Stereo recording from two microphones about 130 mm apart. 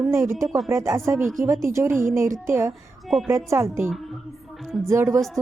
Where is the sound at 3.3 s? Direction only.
20° right (ahead or behind).